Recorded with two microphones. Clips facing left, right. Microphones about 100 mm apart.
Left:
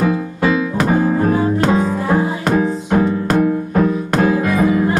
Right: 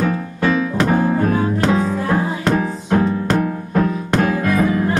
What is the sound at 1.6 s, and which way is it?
Music, 10° left (ahead or behind).